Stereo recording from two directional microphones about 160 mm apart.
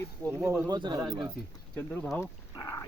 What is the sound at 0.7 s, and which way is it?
Speech, 25° right (ahead or behind).